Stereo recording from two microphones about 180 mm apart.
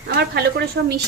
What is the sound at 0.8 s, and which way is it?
Speech, 65° right (ahead or behind).